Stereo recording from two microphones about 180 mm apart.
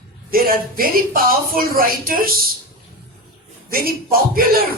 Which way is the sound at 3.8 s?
55° right (ahead or behind).